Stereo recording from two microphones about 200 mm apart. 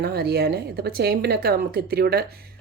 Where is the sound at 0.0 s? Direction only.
55° right (ahead or behind).